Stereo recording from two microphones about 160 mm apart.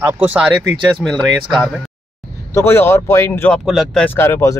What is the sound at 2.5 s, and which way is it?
Speech, 15° left (ahead or behind).